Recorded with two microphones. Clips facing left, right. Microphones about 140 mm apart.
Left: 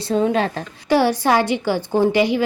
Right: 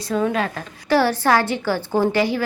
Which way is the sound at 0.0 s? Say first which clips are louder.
Left 3 dB; 25° left (ahead or behind).